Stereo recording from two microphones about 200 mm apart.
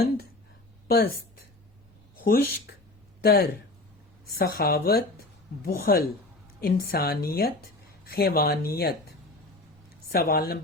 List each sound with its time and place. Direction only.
0.9 s speech: 50° left (ahead or behind)
2.2 s speech: 50° left (ahead or behind)